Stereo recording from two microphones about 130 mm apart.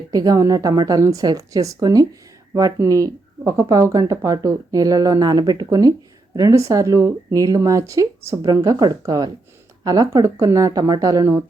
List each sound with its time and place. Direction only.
0.1 s speech: 30° right (ahead or behind)